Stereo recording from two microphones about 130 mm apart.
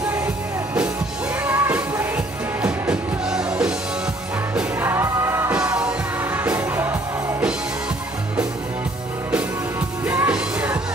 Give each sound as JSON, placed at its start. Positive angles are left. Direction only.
{"t": 1.4, "sound": "music", "side_deg": -10}
{"t": 4.6, "sound": "music", "side_deg": -15}
{"t": 5.6, "sound": "music", "side_deg": -5}
{"t": 10.0, "sound": "music", "side_deg": -10}